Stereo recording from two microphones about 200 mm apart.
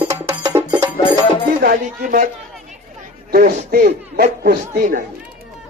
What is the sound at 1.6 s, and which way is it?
Music, 45° right (ahead or behind).